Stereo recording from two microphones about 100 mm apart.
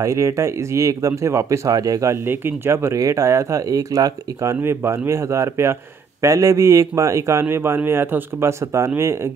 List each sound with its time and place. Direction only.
0.0 s a man's voice: 30° right (ahead or behind)